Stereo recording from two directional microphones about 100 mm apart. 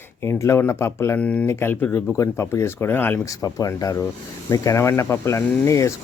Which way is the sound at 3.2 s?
35° left (ahead or behind).